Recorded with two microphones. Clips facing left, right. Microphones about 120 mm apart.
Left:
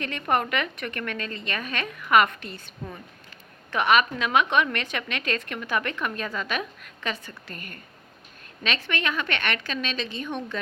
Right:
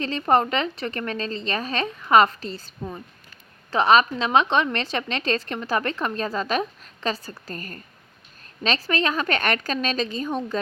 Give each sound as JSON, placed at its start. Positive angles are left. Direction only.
{"t": 0.0, "sound": "a woman's voice", "side_deg": -30}
{"t": 3.7, "sound": "a woman's voice", "side_deg": -35}